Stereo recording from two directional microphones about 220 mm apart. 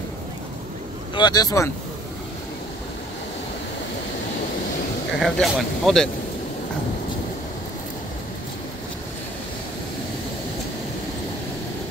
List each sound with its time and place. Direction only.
1.1 s speech: 20° left (ahead or behind)
5.1 s speech: centre (ahead or behind)